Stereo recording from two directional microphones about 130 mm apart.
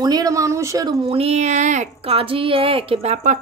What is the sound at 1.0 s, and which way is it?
Speech, 50° right (ahead or behind).